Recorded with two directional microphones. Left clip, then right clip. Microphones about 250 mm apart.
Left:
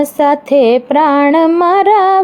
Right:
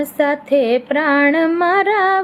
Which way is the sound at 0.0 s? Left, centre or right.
Left.